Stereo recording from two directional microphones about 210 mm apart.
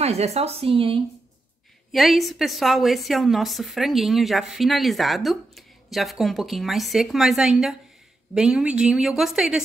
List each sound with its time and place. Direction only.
0.0 s speech: 30° right (ahead or behind)
1.9 s a woman's voice: centre (ahead or behind)